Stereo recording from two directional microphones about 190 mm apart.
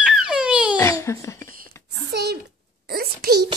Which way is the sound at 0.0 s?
5° right (ahead or behind).